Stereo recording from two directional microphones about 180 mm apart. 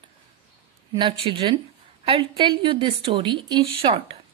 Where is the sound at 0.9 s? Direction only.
30° right (ahead or behind).